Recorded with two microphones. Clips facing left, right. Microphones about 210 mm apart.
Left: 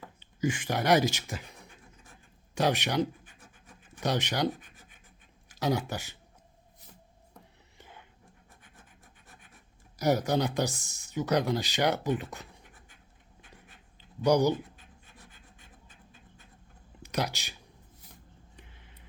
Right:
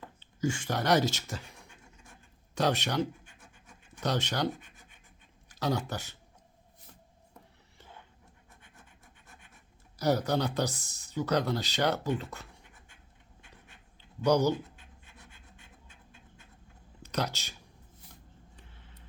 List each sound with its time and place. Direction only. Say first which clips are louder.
0.0 s speech: left 1 dB; 15° left (ahead or behind)
2.6 s speech: left 1 dB; 15° left (ahead or behind)
10.0 s speech: left 1 dB; 15° left (ahead or behind)
14.3 s speech: left 1 dB; 15° left (ahead or behind)
17.0 s speech: left 1 dB; 10° left (ahead or behind)
18.5 s a sound: left 1 dB; 15° left (ahead or behind)